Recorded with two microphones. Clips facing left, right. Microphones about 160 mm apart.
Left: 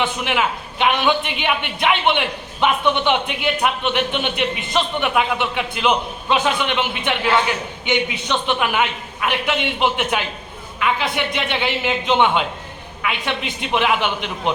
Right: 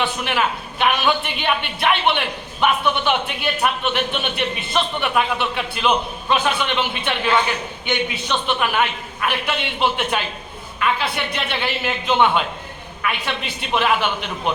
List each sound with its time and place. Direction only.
0.0 s a woman's voice: 15° left (ahead or behind)